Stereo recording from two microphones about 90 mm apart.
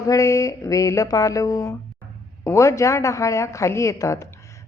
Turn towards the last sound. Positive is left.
turn(degrees=35)  # may be behind; listen again after turning